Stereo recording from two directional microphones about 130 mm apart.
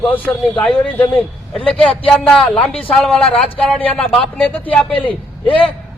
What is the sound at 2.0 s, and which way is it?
A man's voice, 5° left (ahead or behind).